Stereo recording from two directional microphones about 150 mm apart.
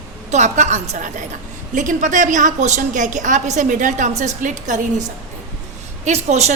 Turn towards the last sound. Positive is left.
turn(degrees=-45)  # may be behind; listen again after turning